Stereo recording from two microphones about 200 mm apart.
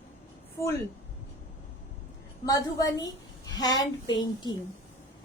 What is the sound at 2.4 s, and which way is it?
A woman's voice, 20° left (ahead or behind).